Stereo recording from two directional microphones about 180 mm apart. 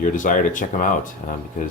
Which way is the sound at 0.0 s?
45° left (ahead or behind).